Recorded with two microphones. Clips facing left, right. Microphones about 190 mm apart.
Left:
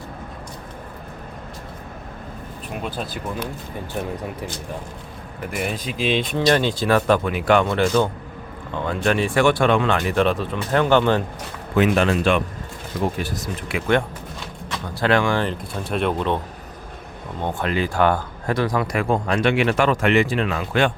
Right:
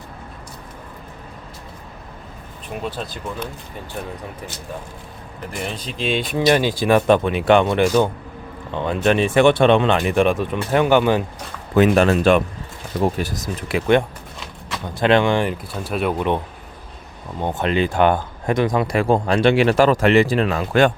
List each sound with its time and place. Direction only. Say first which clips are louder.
5.5 s speech: left 2 dB; 5° left (ahead or behind)
6.3 s speech: right 4 dB; 10° right (ahead or behind)
11.7 s speech: right 3 dB; 40° right (ahead or behind)
15.0 s speech: right 3 dB; 20° right (ahead or behind)
15.4 s speech: right 1 dB; 5° right (ahead or behind)
17.4 s speech: right 3 dB; 20° right (ahead or behind); by 20.9 s 40° right (ahead or behind)